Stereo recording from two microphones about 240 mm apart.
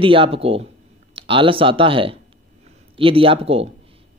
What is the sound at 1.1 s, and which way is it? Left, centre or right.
Speech, right.